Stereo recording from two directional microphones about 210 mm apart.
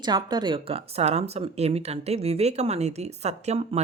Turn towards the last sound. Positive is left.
turn(degrees=-30)  # may be behind; listen again after turning